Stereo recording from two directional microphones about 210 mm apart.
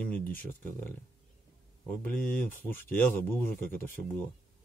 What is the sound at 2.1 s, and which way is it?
Speech, 10° left (ahead or behind).